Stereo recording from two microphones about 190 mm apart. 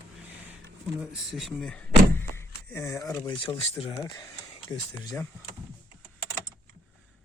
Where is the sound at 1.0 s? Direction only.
5° right (ahead or behind).